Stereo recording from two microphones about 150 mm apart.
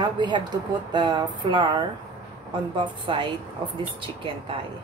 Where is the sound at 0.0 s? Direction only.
30° right (ahead or behind).